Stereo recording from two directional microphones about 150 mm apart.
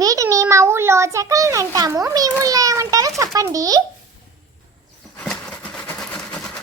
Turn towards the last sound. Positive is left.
turn(degrees=5)  # may be behind; listen again after turning